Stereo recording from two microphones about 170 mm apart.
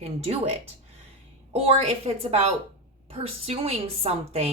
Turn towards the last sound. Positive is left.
turn(degrees=-35)  # may be behind; listen again after turning